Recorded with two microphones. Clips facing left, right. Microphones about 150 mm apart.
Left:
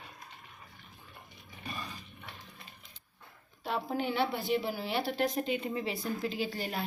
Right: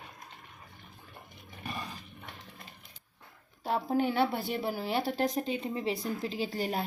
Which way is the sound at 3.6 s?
45° right (ahead or behind).